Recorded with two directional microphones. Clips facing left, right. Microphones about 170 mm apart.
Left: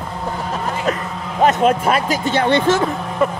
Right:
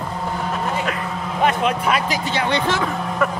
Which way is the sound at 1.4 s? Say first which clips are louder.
Left 5 dB; 40° left (ahead or behind).